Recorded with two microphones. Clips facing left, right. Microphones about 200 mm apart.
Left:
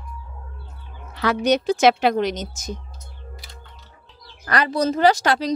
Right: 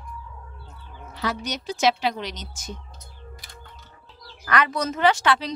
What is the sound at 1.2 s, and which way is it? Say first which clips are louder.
A woman's voice: left 10 dB; 65° left (ahead or behind).